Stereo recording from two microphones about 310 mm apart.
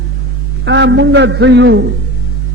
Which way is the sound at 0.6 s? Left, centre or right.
Right.